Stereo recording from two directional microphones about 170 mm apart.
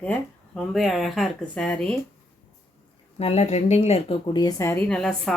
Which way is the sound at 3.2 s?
40° left (ahead or behind).